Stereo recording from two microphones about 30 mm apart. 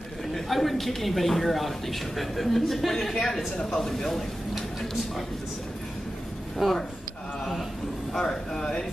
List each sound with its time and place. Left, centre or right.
0.3 s a woman's voice: centre
6.6 s a woman's voice: centre
8.2 s speech: centre